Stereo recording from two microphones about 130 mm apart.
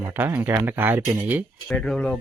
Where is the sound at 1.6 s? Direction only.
5° left (ahead or behind).